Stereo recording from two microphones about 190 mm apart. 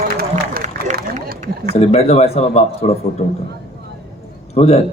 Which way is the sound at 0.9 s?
50° right (ahead or behind).